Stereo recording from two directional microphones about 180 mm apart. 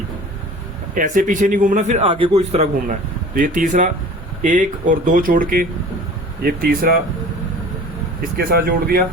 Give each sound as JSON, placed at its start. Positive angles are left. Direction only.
{"t": 0.9, "sound": "a man's voice", "side_deg": -45}
{"t": 3.3, "sound": "a man's voice", "side_deg": -45}
{"t": 8.2, "sound": "a man's voice", "side_deg": -55}